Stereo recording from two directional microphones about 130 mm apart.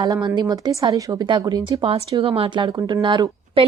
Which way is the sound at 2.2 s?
45° right (ahead or behind).